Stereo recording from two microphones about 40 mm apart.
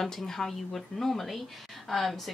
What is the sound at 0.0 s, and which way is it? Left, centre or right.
Speech, centre.